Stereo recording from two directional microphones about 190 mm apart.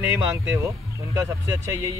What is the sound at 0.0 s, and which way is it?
Speech, 15° right (ahead or behind).